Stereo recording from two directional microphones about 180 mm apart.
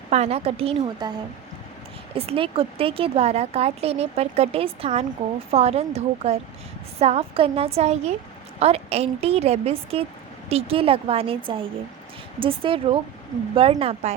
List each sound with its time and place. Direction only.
0.1 s speech: 35° right (ahead or behind)
2.1 s speech: 30° right (ahead or behind)